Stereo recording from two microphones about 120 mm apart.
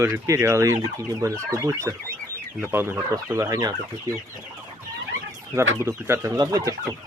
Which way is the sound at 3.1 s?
30° right (ahead or behind).